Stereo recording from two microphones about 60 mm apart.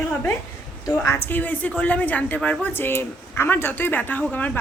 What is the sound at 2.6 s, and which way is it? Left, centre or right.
Speech, left.